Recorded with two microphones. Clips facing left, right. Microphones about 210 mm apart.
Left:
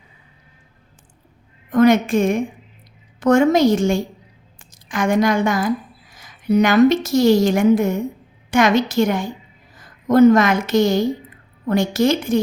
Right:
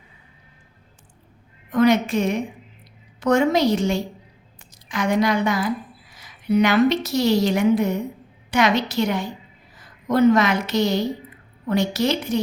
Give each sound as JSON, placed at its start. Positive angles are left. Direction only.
{"t": 1.7, "sound": "a woman's voice", "side_deg": 50}